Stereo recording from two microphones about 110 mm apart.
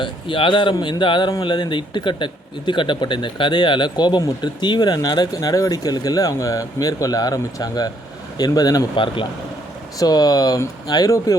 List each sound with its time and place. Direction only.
0.0 s speech: 50° left (ahead or behind); by 8.9 s 35° left (ahead or behind)
10.0 s speech: 35° left (ahead or behind)